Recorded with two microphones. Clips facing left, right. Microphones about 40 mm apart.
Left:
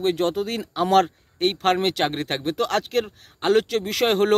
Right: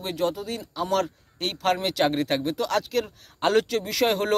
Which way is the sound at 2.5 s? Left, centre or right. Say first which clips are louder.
Left 2 dB; left.